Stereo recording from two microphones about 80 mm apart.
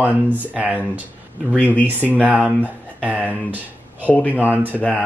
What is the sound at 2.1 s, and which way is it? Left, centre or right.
Speech, centre.